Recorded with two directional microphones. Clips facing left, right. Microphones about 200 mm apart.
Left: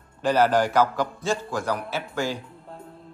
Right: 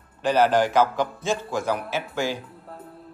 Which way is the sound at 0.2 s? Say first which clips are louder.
Right 1 dB; 15° right (ahead or behind).